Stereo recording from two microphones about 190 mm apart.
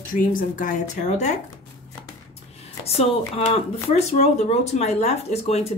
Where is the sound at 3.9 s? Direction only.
35° left (ahead or behind).